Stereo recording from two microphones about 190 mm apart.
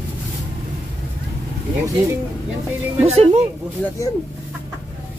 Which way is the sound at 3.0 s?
35° right (ahead or behind).